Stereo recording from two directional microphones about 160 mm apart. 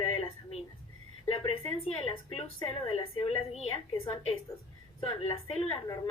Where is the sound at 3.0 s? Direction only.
40° left (ahead or behind).